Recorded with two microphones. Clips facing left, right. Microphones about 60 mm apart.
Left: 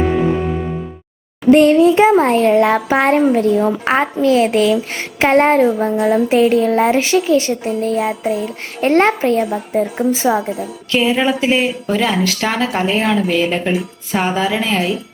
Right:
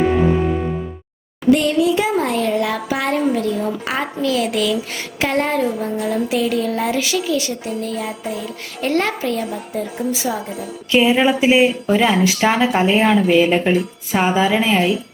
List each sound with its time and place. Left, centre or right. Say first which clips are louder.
0.0 s music: even; centre
1.5 s speech: left 6 dB; left
10.9 s a woman's voice: right 1 dB; centre